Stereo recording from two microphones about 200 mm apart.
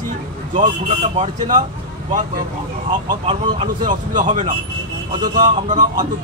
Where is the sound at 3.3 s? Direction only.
25° right (ahead or behind).